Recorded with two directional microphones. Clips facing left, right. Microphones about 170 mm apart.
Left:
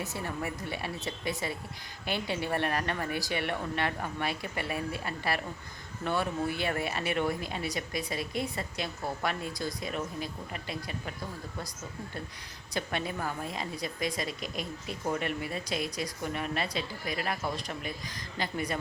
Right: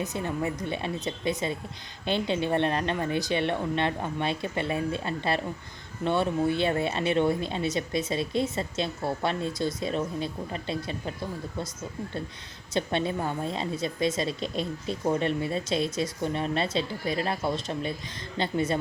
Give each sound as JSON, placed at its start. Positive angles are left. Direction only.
{"t": 0.0, "sound": "a woman's voice", "side_deg": -20}
{"t": 12.7, "sound": "a woman's voice", "side_deg": -25}